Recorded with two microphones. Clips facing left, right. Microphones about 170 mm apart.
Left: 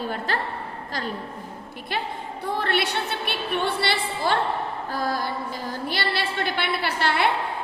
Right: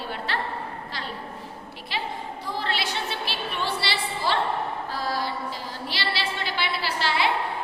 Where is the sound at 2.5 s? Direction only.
60° left (ahead or behind).